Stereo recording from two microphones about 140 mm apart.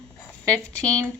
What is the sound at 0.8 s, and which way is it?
Speech, 25° right (ahead or behind).